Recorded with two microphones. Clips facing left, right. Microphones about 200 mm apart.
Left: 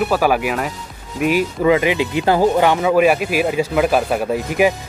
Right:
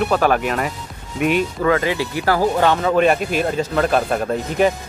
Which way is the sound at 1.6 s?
15° left (ahead or behind).